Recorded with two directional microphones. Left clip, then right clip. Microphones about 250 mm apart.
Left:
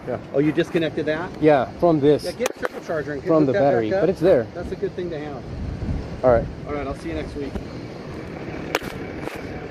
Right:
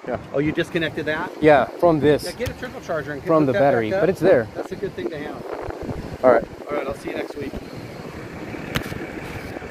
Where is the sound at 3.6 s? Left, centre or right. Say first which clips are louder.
Right 1 dB; right.